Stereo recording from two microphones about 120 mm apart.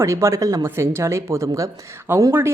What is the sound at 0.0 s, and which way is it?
Speech, 25° right (ahead or behind).